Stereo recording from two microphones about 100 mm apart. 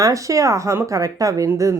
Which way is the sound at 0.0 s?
35° right (ahead or behind).